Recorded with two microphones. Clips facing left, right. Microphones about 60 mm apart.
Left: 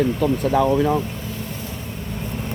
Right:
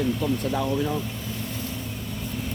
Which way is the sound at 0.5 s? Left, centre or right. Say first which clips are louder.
Left 8 dB; left.